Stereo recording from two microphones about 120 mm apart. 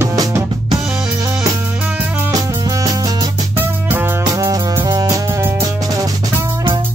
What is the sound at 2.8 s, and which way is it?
Music, 30° right (ahead or behind).